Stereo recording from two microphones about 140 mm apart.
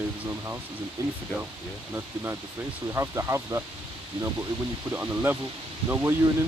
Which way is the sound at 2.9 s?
20° right (ahead or behind).